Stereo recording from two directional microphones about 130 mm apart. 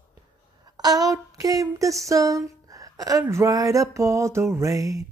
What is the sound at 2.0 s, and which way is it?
Speech, 25° right (ahead or behind).